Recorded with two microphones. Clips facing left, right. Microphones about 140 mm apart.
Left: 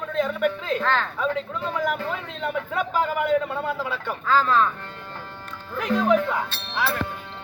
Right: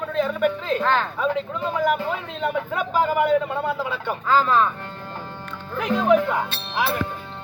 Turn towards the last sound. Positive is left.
turn(degrees=-20)  # may be behind; listen again after turning